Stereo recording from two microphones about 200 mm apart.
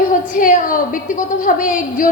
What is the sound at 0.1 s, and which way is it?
A woman's voice, 40° left (ahead or behind).